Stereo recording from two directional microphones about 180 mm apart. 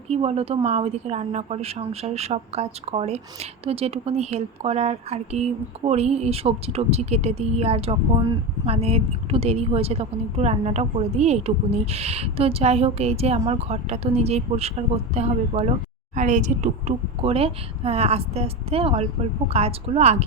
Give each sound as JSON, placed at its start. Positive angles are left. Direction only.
{"t": 0.1, "sound": "speech", "side_deg": -35}